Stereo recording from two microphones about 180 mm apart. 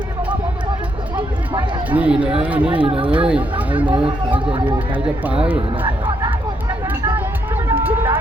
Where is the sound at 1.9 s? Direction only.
5° right (ahead or behind).